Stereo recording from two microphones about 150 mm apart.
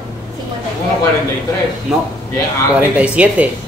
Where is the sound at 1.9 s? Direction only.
5° right (ahead or behind).